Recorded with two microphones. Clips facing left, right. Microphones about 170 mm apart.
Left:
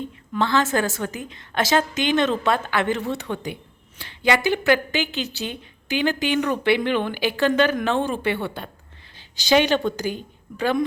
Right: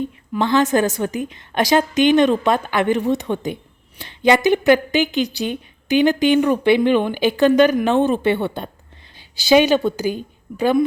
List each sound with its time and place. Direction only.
0.3 s a woman's voice: 15° right (ahead or behind)
9.3 s a woman's voice: 10° right (ahead or behind)